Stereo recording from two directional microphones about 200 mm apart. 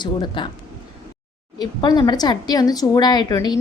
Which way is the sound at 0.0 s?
25° left (ahead or behind).